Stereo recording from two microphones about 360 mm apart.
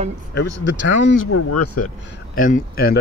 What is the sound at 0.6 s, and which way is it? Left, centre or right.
Speech, left.